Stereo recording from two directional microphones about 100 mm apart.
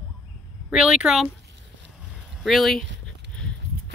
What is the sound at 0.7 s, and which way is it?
Speech, 5° right (ahead or behind).